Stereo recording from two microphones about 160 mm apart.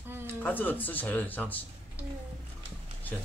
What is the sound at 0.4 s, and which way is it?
Speech, 10° left (ahead or behind).